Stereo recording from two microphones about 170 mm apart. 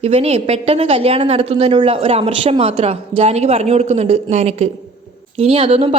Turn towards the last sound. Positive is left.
turn(degrees=-35)  # may be behind; listen again after turning